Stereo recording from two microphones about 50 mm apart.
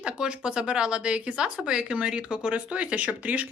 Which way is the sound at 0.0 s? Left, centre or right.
Centre.